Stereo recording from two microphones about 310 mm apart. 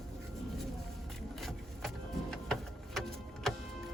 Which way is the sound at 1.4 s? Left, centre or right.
Centre.